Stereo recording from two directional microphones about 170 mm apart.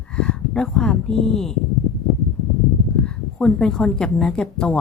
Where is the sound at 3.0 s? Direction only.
5° left (ahead or behind).